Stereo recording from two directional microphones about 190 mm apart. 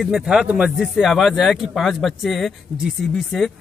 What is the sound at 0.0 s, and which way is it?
Speech, 5° right (ahead or behind).